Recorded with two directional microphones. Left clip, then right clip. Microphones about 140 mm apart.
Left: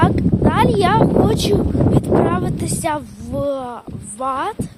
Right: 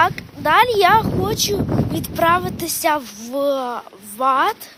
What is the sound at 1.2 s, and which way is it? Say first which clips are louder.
Speech: left 4 dB; 40° left (ahead or behind).